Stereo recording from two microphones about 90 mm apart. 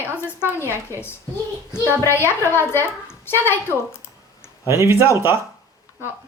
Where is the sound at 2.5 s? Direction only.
25° left (ahead or behind).